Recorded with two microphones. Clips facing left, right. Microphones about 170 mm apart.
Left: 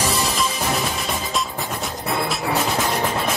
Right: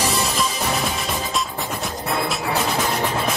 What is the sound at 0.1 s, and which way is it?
Music, centre (ahead or behind).